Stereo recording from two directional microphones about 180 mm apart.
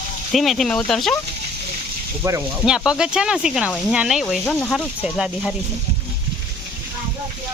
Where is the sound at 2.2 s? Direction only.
15° right (ahead or behind).